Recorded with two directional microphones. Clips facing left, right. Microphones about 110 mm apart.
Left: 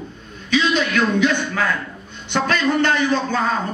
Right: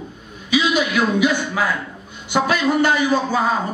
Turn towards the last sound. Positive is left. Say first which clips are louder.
# right 1 dB
turn(degrees=-10)  # may be behind; listen again after turning